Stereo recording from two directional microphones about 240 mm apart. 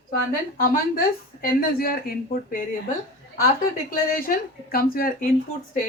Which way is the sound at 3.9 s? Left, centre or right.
Left.